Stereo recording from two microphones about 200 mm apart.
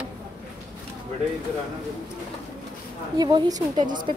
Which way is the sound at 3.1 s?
20° right (ahead or behind).